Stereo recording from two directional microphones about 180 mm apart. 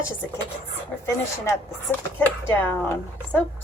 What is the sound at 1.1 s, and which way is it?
A woman's voice, 15° left (ahead or behind).